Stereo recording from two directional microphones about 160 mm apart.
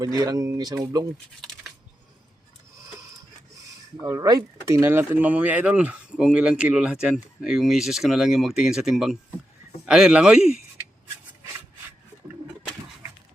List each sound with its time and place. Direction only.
0.0 s speech: 25° right (ahead or behind)
4.0 s speech: 25° right (ahead or behind); by 10.6 s 5° right (ahead or behind)